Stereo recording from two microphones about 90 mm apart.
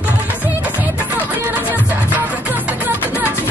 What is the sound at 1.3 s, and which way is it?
Music, 20° right (ahead or behind).